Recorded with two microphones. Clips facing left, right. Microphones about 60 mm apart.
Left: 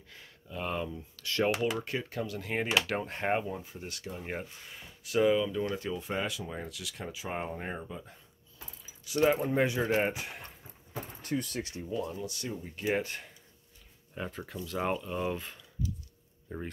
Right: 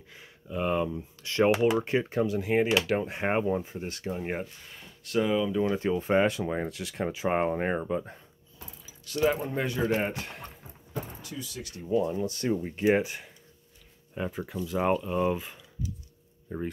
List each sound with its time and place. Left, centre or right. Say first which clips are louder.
0.1 s speech: right 7 dB; centre
3.4 s speech: right 9 dB; right
4.2 s speech: right 4 dB; centre
4.6 s speech: even; centre
5.5 s speech: right 6 dB; right
5.8 s speech: right 9 dB; right
9.3 s speech: left 2 dB; centre
11.2 s speech: left 6 dB; left
11.9 s speech: right 10 dB; right
12.7 s speech: right 6 dB; right
13.0 s speech: right 4 dB; centre